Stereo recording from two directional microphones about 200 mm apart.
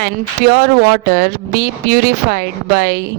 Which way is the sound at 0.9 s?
50° right (ahead or behind).